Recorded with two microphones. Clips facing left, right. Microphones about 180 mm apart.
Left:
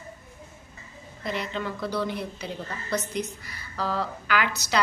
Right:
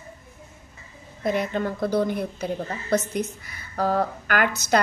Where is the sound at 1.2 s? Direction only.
50° right (ahead or behind).